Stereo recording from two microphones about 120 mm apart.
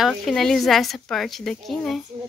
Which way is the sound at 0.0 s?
Centre (ahead or behind).